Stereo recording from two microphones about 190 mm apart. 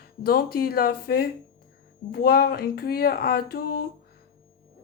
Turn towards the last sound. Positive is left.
turn(degrees=50)  # may be behind; listen again after turning